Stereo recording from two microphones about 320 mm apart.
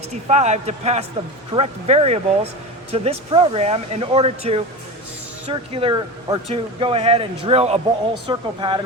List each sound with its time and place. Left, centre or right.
0.1 s speech: right